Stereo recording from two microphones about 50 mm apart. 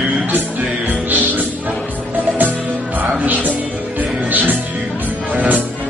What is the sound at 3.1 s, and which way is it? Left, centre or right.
Music, right.